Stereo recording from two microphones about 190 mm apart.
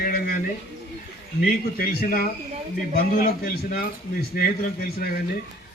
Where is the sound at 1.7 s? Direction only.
55° left (ahead or behind).